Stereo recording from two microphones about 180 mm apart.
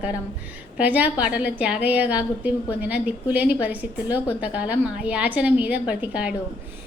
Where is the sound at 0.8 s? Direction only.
10° right (ahead or behind).